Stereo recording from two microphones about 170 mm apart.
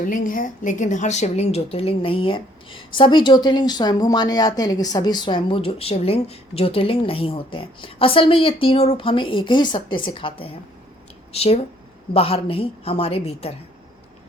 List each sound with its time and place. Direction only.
0.0 s a woman's voice: 55° left (ahead or behind); by 13.5 s 35° left (ahead or behind)